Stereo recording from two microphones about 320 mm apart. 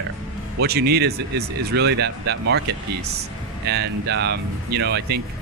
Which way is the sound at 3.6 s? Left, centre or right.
Right.